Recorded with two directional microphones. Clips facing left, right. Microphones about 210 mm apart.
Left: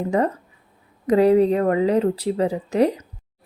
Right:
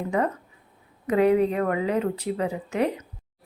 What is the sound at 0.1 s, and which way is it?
A woman's voice, 35° left (ahead or behind).